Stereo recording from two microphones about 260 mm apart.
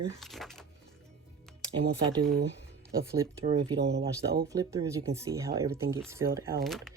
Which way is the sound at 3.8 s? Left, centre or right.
Right.